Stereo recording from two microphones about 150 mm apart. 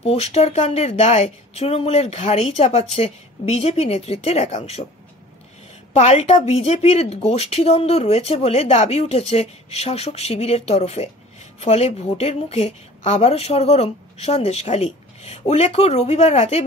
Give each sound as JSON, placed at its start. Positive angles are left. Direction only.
{"t": 0.0, "sound": "a woman's voice", "side_deg": 45}
{"t": 5.9, "sound": "a woman's voice", "side_deg": 45}